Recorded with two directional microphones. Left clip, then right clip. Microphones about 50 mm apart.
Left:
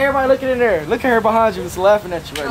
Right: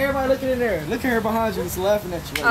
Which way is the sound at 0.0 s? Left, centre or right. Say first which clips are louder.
Left 6 dB; left.